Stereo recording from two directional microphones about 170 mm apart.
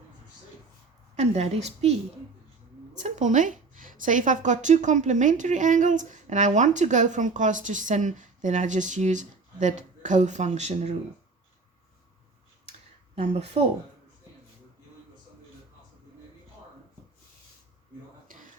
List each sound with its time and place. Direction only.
1.1 s a woman's voice: 40° right (ahead or behind)
3.0 s a woman's voice: 45° right (ahead or behind)
13.1 s a woman's voice: 40° right (ahead or behind)
18.3 s a sound: 55° right (ahead or behind)